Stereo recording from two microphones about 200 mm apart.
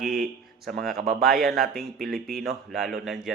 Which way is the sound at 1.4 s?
Centre (ahead or behind).